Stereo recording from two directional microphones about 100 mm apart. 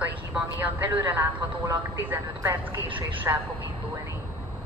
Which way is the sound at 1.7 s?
30° right (ahead or behind).